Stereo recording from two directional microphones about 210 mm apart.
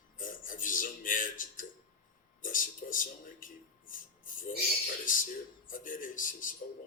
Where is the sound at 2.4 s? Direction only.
40° left (ahead or behind).